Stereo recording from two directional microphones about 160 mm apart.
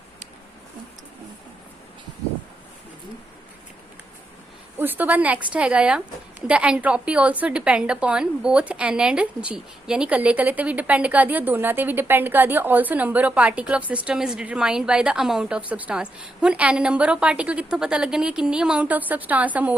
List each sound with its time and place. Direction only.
4.8 s a woman's voice: 10° right (ahead or behind)